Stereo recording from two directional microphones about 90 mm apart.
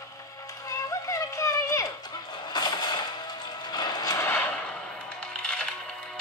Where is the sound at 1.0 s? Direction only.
35° left (ahead or behind).